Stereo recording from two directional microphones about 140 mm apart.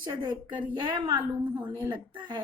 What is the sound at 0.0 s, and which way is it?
Speech, 35° right (ahead or behind).